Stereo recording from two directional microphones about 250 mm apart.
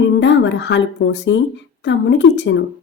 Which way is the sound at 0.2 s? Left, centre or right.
Left.